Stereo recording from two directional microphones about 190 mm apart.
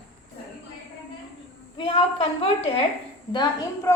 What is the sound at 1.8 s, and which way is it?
A woman's voice, 25° left (ahead or behind).